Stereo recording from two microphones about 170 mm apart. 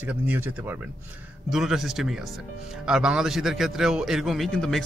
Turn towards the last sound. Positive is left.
turn(degrees=5)  # may be behind; listen again after turning